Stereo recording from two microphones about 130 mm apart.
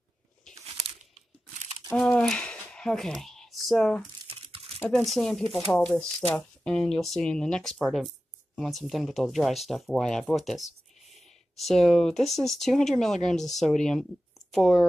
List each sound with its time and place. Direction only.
2.0 s a sound: 5° left (ahead or behind)
4.2 s crumpling: 45° right (ahead or behind)
4.8 s speech: centre (ahead or behind)